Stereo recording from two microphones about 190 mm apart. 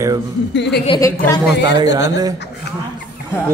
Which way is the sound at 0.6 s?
65° left (ahead or behind).